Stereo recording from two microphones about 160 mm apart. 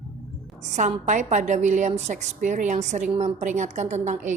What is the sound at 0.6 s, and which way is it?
A woman's voice, 45° right (ahead or behind).